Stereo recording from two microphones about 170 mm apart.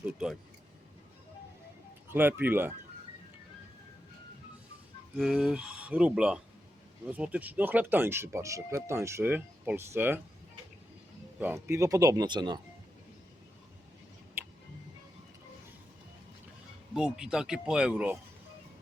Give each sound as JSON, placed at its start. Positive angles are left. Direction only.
{"t": 0.0, "sound": "speech", "side_deg": -5}
{"t": 2.0, "sound": "speech", "side_deg": -10}
{"t": 5.1, "sound": "speech", "side_deg": -5}
{"t": 11.3, "sound": "speech", "side_deg": -10}
{"t": 16.9, "sound": "speech", "side_deg": -5}